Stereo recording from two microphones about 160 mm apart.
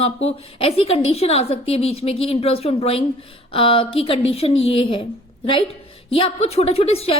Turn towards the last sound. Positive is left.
turn(degrees=40)  # may be behind; listen again after turning